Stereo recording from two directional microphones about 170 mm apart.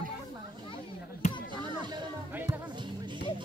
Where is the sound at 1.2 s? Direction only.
45° left (ahead or behind).